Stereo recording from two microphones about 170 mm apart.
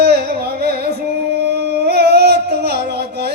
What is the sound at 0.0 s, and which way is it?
Carnatic music, 75° right (ahead or behind).